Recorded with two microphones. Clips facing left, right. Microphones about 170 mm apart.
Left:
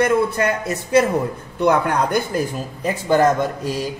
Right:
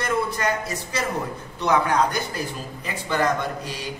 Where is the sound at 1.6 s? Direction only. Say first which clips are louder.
Left 3 dB; 55° left (ahead or behind).